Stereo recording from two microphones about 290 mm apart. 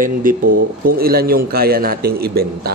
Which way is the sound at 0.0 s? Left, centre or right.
Right.